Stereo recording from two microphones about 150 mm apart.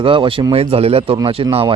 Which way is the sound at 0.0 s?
35° right (ahead or behind).